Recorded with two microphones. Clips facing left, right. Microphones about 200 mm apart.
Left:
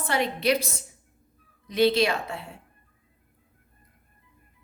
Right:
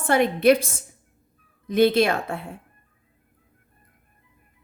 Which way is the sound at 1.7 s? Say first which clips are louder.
Right 3 dB; 50° right (ahead or behind).